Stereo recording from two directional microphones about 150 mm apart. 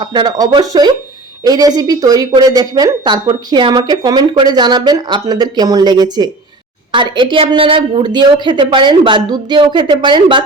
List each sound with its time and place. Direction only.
0.0 s a woman's voice: 30° right (ahead or behind)